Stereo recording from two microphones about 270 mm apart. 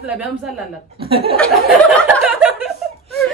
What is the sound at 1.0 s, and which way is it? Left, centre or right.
Speech, right.